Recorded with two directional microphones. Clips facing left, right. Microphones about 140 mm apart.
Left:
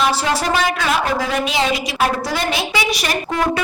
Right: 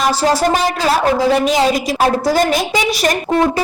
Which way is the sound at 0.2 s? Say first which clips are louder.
Right 4 dB; 40° right (ahead or behind).